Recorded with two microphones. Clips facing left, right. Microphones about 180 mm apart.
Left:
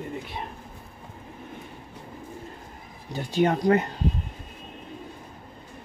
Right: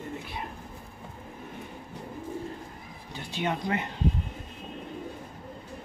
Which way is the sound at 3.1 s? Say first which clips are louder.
Left 8 dB; 40° left (ahead or behind).